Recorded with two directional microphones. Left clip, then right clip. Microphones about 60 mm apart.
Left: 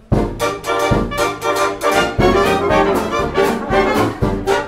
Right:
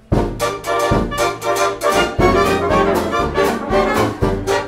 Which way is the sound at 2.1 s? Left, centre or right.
Left.